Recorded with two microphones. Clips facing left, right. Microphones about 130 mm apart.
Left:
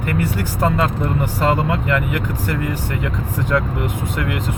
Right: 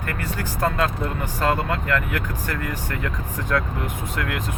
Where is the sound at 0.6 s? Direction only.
15° left (ahead or behind).